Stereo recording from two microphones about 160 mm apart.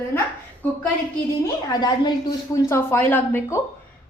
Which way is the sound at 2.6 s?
15° left (ahead or behind).